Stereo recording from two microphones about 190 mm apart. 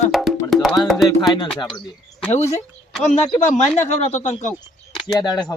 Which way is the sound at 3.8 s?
35° left (ahead or behind).